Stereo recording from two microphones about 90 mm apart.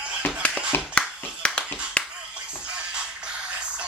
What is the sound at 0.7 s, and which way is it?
Finger snapping, 25° left (ahead or behind).